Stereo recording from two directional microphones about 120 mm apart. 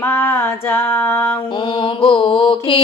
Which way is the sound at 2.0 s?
45° left (ahead or behind).